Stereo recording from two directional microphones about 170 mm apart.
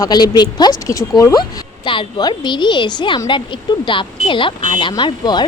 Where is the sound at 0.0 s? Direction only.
25° left (ahead or behind).